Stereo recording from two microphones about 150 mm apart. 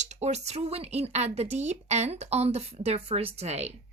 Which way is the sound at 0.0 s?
50° right (ahead or behind).